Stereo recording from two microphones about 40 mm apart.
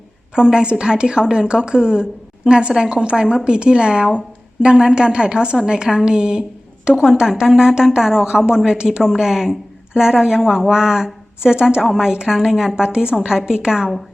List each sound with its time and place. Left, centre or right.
0.3 s a woman's voice: right